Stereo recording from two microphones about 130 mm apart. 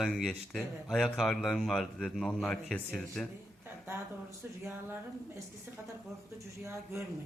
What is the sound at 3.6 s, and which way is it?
Speech, 20° right (ahead or behind).